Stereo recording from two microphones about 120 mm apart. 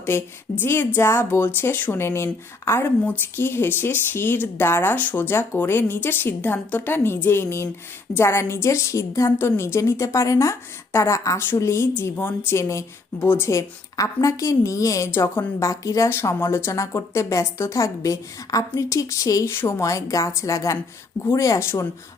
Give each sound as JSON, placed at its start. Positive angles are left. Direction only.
{"t": 0.0, "sound": "a woman's voice", "side_deg": 20}